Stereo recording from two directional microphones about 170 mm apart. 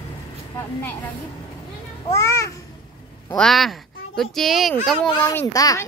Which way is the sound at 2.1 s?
15° left (ahead or behind).